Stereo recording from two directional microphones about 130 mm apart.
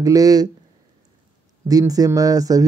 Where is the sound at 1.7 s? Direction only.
30° right (ahead or behind).